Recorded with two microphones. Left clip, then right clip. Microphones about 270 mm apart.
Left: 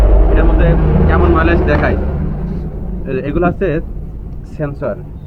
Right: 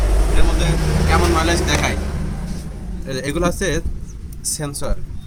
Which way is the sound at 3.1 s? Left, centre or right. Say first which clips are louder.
Left 5 dB; right.